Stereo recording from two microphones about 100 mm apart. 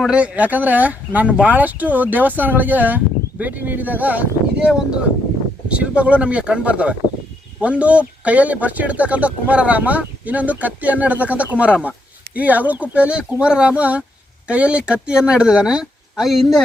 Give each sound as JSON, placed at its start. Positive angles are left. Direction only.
{"t": 0.0, "sound": "speech", "side_deg": -10}
{"t": 5.6, "sound": "speech", "side_deg": -10}